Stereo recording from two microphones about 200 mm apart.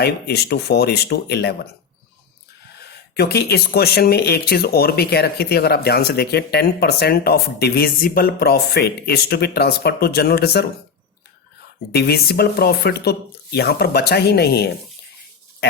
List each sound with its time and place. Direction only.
0.0 s speech: 55° left (ahead or behind)
2.9 s speech: 55° left (ahead or behind)
11.9 s speech: 50° left (ahead or behind)